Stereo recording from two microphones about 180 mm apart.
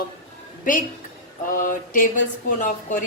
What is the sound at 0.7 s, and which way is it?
Speech, 45° left (ahead or behind).